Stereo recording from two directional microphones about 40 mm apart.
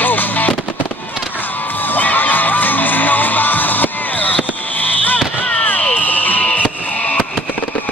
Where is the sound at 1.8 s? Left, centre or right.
Left.